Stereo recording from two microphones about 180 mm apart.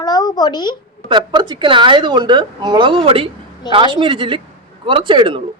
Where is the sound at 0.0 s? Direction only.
20° left (ahead or behind).